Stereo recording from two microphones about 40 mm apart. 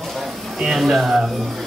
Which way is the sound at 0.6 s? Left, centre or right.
Centre.